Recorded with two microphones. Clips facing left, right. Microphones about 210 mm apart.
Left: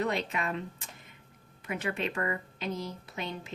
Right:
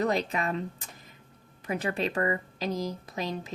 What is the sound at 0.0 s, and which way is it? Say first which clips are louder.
A woman's voice: right 4 dB; 40° right (ahead or behind).